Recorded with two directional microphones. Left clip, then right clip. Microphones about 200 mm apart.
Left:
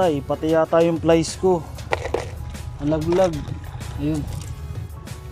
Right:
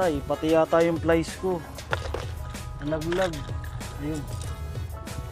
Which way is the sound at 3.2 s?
Centre (ahead or behind).